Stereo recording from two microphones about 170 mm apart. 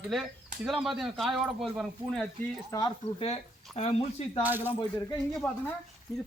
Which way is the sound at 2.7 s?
25° left (ahead or behind).